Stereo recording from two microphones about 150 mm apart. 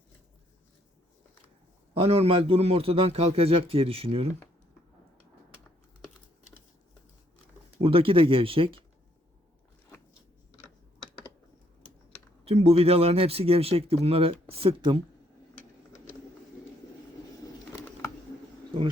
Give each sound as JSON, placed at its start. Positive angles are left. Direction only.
{"t": 1.9, "sound": "speech", "side_deg": -40}
{"t": 7.8, "sound": "speech", "side_deg": -35}
{"t": 12.5, "sound": "speech", "side_deg": -40}
{"t": 17.7, "sound": "a sound", "side_deg": 15}